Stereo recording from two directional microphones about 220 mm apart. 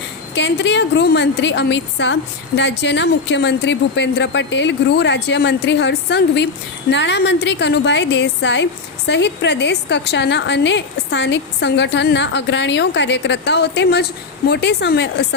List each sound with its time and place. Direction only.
0.3 s a woman's voice: 55° left (ahead or behind)